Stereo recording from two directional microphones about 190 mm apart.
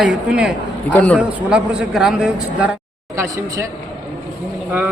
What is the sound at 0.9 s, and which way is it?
Speech, 5° left (ahead or behind).